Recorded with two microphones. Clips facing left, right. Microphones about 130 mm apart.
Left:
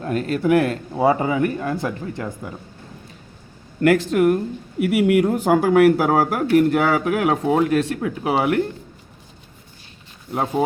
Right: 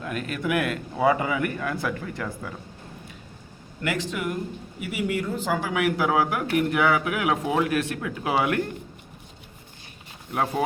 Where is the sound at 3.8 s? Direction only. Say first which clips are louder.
Left 12 dB; 50° left (ahead or behind); by 5.3 s 85° left.